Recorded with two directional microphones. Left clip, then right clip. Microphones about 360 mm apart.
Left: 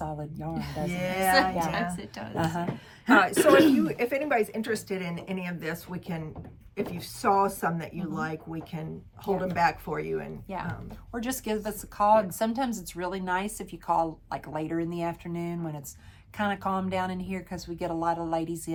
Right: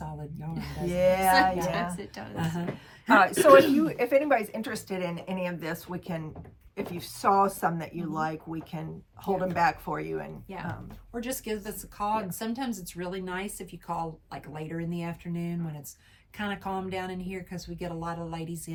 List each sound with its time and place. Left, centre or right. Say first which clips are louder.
0.5 s a woman's voice: right 3 dB; centre
2.3 s a woman's voice: left 6 dB; centre
3.1 s speech: right 2 dB; centre
11.1 s a woman's voice: left 2 dB; centre